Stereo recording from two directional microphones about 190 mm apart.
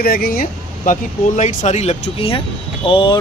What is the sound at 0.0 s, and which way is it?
Speech, 50° left (ahead or behind).